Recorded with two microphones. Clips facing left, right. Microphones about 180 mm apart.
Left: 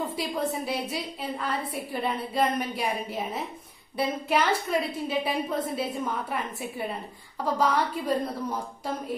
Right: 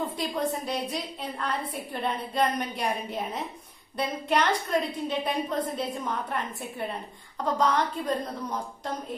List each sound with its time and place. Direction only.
0.1 s a woman's voice: 5° left (ahead or behind)